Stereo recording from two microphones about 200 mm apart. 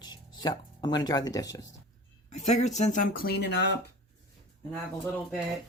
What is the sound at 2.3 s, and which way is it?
Speech, 35° left (ahead or behind).